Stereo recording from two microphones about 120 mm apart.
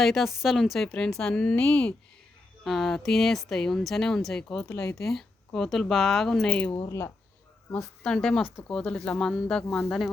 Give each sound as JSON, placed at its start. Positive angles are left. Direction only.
{"t": 0.0, "sound": "a woman's voice", "side_deg": 0}
{"t": 6.7, "sound": "speech", "side_deg": 25}
{"t": 7.8, "sound": "a woman's voice", "side_deg": 5}